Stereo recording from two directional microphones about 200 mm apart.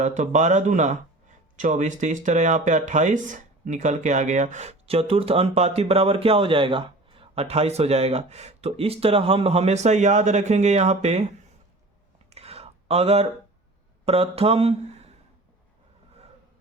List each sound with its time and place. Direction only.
0.0 s speech: 35° right (ahead or behind)
12.3 s a sound: 30° right (ahead or behind)
14.0 s speech: 30° right (ahead or behind)